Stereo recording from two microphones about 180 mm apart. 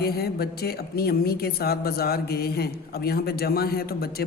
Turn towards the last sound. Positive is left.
turn(degrees=60)  # may be behind; listen again after turning